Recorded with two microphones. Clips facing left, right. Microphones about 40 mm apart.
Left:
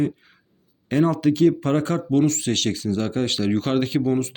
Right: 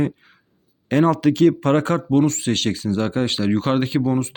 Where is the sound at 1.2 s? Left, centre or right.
Right.